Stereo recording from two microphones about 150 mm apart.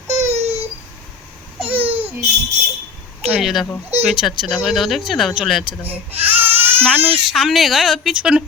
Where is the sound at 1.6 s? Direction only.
35° right (ahead or behind).